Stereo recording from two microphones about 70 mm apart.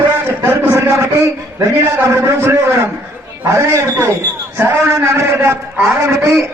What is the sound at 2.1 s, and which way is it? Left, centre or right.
Speech, right.